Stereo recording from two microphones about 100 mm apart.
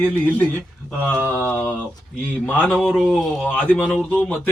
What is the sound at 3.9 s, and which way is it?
Speech, 15° left (ahead or behind).